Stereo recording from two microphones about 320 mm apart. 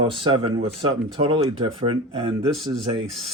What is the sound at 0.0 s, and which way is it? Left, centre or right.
Speech, centre.